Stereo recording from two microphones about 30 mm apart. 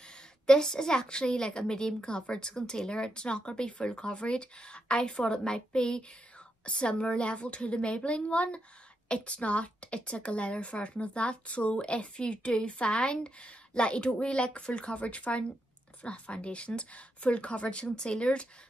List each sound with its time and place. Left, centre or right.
0.5 s a woman's voice: left
16.0 s speech: left
17.9 s speech: left